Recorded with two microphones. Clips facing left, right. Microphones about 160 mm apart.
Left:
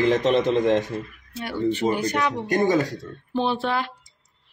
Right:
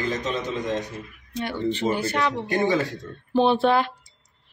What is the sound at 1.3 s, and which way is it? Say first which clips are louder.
Speech: left 2 dB; 10° left (ahead or behind).